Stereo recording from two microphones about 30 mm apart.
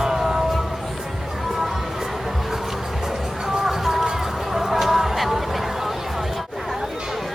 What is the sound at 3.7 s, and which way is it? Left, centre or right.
Music, centre.